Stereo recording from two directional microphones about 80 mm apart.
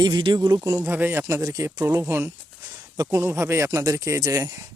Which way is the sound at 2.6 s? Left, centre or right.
Right.